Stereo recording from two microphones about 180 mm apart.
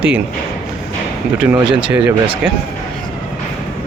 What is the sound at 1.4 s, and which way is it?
Speech, 10° right (ahead or behind).